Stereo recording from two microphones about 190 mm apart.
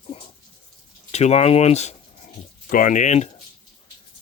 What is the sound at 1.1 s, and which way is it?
Speech, 35° left (ahead or behind).